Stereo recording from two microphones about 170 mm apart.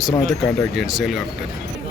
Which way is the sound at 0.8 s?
Centre (ahead or behind).